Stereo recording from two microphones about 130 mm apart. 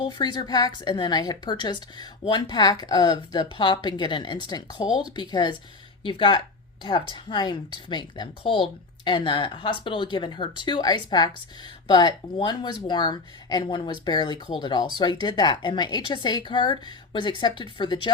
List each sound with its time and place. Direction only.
0.0 s speech: 35° left (ahead or behind)